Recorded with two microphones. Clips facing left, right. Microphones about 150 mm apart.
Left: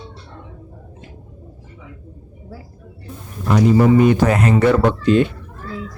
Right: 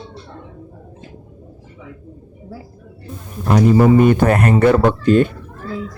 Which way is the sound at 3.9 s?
50° right (ahead or behind).